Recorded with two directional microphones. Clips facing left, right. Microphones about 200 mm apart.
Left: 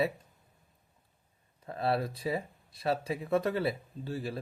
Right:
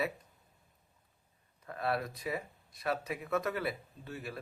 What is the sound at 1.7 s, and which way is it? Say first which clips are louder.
Speech: left 4 dB; 30° left (ahead or behind).